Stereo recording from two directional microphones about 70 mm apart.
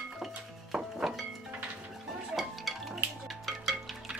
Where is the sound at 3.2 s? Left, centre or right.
Centre.